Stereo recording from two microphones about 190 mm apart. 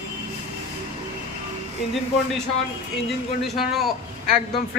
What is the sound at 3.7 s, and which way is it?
Speech, centre (ahead or behind).